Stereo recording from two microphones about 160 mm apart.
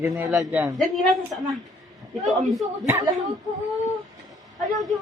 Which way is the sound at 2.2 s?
Centre (ahead or behind).